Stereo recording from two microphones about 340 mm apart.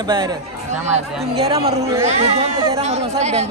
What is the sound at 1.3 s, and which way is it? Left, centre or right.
A man's voice, centre.